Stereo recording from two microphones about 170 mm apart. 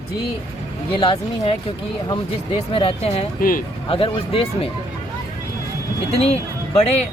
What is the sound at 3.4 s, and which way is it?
Speech, 55° left (ahead or behind).